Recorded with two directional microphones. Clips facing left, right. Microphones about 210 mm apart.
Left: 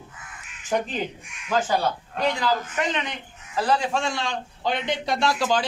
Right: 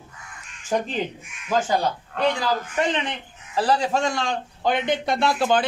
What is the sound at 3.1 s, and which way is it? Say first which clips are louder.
Speech: right 3 dB; 30° right (ahead or behind).